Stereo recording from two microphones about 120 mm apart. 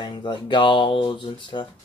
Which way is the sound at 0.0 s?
40° left (ahead or behind).